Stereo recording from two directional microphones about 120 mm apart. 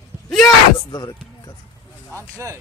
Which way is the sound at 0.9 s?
35° left (ahead or behind).